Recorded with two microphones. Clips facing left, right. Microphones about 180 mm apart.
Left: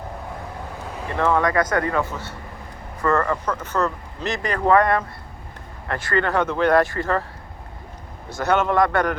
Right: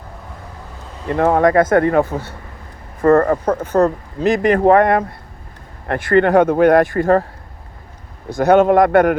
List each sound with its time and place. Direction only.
1.1 s speech: 50° right (ahead or behind)
1.5 s speech: 25° right (ahead or behind)
1.9 s speech: 50° right (ahead or behind)
8.4 s speech: 50° right (ahead or behind)